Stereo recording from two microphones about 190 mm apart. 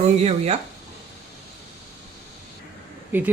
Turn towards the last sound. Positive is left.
turn(degrees=-10)  # may be behind; listen again after turning